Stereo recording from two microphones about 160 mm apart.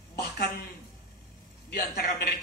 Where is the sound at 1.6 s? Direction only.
85° left.